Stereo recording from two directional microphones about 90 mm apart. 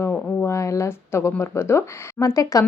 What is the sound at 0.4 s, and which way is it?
Speech, 35° left (ahead or behind).